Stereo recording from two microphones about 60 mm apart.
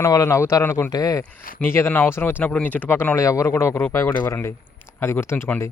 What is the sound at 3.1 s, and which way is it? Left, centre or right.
Speech, left.